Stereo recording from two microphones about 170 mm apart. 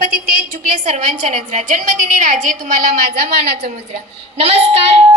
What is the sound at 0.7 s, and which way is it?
A woman's voice, 45° right (ahead or behind).